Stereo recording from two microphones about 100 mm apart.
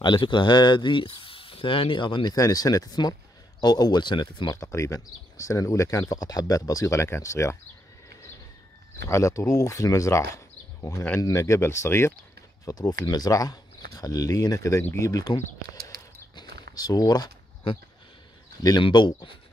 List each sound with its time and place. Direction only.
0.0 s speech: 50° left (ahead or behind)
2.3 s speech: 35° left (ahead or behind)
4.6 s speech: 30° left (ahead or behind)
9.1 s speech: 30° left (ahead or behind)
12.6 s speech: 40° left (ahead or behind)
16.3 s a sound: 40° left (ahead or behind)
18.8 s speech: 55° left (ahead or behind)